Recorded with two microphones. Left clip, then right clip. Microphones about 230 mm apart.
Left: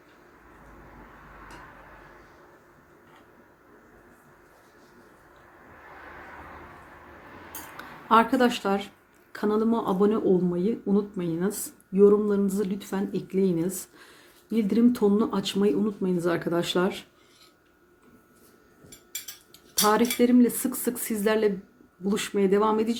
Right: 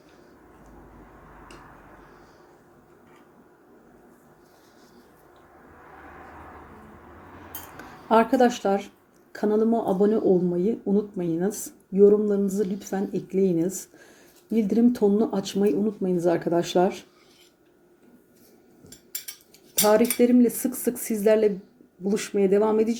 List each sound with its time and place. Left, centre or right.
8.1 s speech: centre
19.9 s speech: centre